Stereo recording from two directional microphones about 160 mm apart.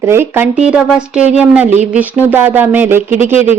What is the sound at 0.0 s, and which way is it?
Speech, 15° right (ahead or behind).